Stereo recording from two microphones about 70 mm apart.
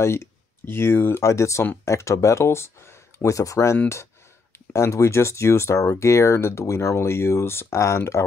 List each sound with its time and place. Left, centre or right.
0.0 s speech: left
1.2 s speech: left